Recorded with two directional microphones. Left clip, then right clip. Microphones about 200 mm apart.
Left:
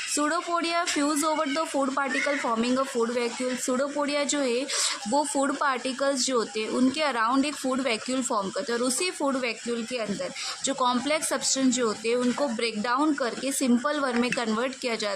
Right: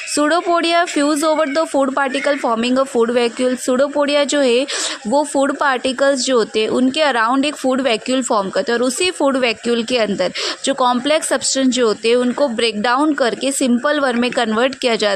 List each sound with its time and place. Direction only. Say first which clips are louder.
0.2 s speech: right 12 dB; 30° right (ahead or behind)